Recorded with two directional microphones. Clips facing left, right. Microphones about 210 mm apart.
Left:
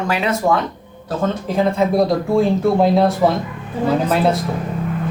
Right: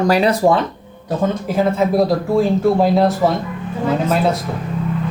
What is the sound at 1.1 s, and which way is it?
Speech, 10° right (ahead or behind).